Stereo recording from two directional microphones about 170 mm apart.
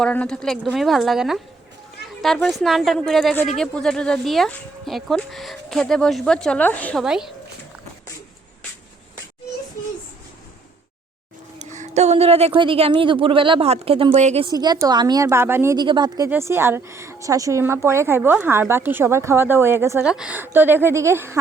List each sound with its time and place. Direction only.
0.0 s speech: 5° left (ahead or behind)
7.0 s speech: 5° right (ahead or behind)
11.6 s a woman's voice: 45° right (ahead or behind)
14.4 s a woman's voice: 25° right (ahead or behind)